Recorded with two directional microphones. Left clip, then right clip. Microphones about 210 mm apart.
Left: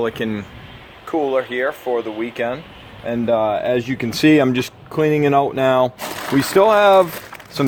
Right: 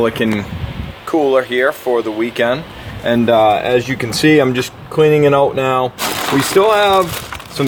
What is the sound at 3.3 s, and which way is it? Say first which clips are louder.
Speech: right 5 dB; 20° left (ahead or behind).